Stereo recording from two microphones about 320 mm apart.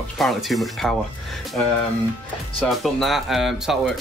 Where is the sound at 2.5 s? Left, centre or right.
Centre.